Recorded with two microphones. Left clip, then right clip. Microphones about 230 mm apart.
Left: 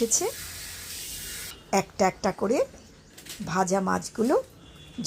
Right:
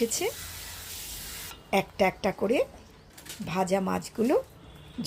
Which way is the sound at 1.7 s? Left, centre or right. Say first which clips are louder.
Left 1 dB; centre.